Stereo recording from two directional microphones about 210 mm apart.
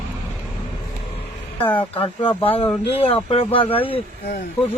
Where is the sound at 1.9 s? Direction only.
25° left (ahead or behind).